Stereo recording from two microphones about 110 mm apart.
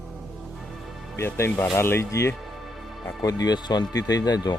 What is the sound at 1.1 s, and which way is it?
Speech, 20° left (ahead or behind).